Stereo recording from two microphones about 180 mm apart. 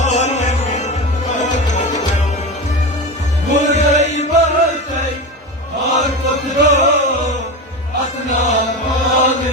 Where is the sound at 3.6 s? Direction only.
40° left (ahead or behind).